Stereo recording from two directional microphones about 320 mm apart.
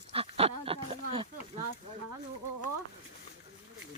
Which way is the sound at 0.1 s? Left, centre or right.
Centre.